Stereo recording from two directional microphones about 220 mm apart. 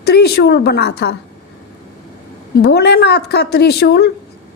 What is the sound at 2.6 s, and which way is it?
Speech, 50° left (ahead or behind).